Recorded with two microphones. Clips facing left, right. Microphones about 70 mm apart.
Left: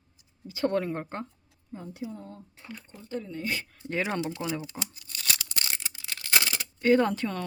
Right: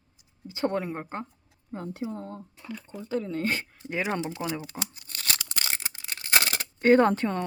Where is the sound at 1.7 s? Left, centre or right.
Right.